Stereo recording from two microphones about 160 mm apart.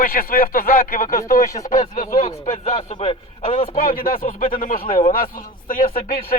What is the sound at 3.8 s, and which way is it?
A man's voice, 65° left (ahead or behind).